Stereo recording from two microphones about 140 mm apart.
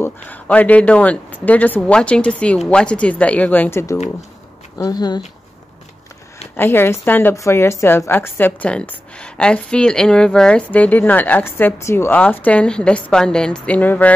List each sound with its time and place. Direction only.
0.0 s a woman's voice: 10° left (ahead or behind); by 5.2 s 30° left (ahead or behind)
6.5 s a woman's voice: 15° left (ahead or behind)